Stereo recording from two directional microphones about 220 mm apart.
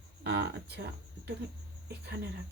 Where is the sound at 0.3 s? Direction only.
50° right (ahead or behind).